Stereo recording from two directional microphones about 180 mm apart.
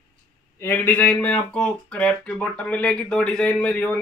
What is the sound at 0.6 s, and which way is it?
Speech, 10° left (ahead or behind).